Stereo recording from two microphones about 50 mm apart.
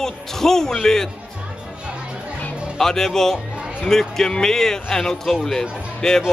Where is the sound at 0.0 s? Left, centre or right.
Centre.